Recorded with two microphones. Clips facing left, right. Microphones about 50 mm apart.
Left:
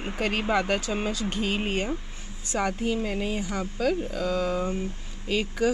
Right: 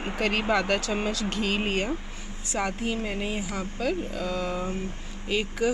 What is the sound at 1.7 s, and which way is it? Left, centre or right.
Speech, centre.